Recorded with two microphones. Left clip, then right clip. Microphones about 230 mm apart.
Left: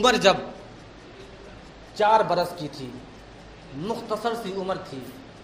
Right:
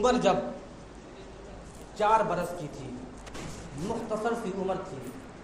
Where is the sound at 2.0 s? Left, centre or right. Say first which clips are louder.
Left 5 dB; left.